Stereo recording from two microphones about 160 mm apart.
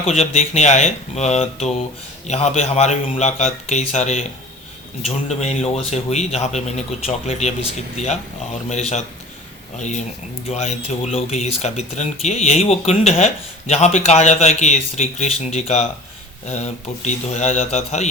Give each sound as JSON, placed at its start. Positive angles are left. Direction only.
{"t": 0.0, "sound": "speech", "side_deg": 45}